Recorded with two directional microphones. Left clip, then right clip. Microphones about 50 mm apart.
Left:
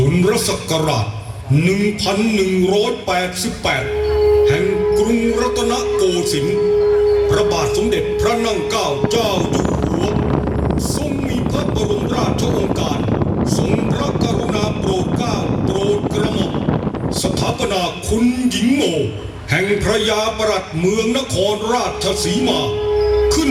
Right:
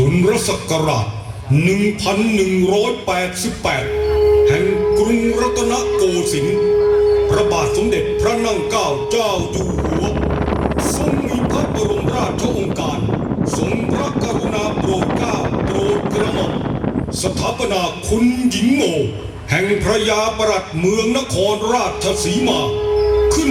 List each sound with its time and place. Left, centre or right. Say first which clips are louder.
0.0 s speech: right 1 dB; centre
1.5 s a sound: even; centre
3.7 s music: even; centre
7.3 s speech: even; centre
19.5 s speech: even; centre
23.1 s music: even; centre